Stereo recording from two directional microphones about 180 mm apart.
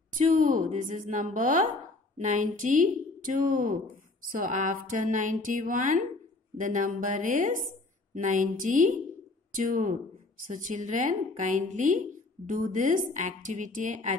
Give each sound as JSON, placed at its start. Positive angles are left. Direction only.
{"t": 0.2, "sound": "a woman's voice", "side_deg": -45}